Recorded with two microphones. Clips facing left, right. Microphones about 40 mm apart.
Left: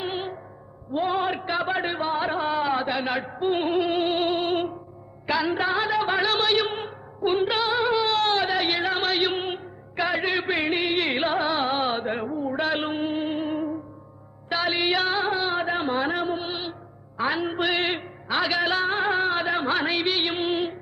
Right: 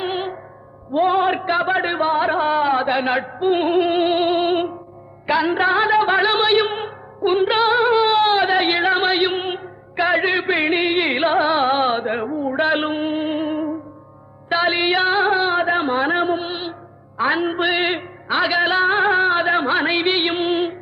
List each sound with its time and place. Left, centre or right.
0.0 s music: right
0.9 s a sound: right
5.2 s music: right